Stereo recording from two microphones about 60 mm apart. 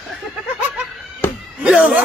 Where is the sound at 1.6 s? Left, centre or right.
Centre.